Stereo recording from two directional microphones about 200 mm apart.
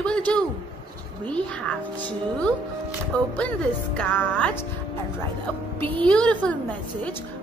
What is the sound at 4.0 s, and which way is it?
Speech, 10° left (ahead or behind).